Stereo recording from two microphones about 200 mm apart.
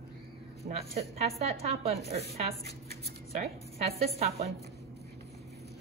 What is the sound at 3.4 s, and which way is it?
A woman's voice, 30° right (ahead or behind).